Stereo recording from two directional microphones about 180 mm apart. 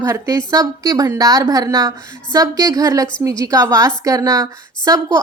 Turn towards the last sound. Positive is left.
turn(degrees=-20)  # may be behind; listen again after turning